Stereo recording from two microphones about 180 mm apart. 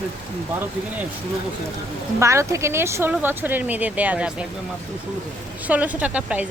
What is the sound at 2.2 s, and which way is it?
Speech, 15° right (ahead or behind).